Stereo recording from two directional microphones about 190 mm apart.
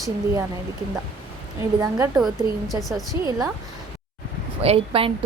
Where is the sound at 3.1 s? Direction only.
10° right (ahead or behind).